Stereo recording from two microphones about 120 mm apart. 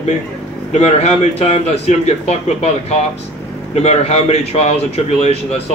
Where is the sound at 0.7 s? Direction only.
70° left (ahead or behind).